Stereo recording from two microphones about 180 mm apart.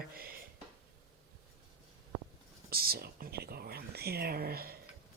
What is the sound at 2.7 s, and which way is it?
Speech, 55° right (ahead or behind).